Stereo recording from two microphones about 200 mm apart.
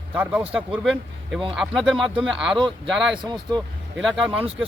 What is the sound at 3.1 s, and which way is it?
Speech, 20° right (ahead or behind).